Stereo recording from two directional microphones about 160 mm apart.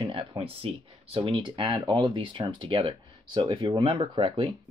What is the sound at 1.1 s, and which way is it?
Speech, 35° right (ahead or behind).